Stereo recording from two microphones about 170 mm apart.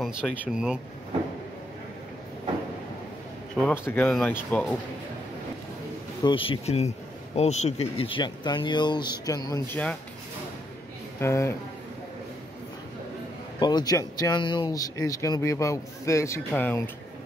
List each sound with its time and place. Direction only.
0.0 s speech: 5° right (ahead or behind)
3.6 s speech: 15° left (ahead or behind)
6.2 s speech: 30° left (ahead or behind)
11.1 s speech: 15° left (ahead or behind)
13.6 s speech: 25° left (ahead or behind)